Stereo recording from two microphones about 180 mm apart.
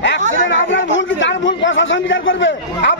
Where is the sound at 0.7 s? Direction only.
90° left.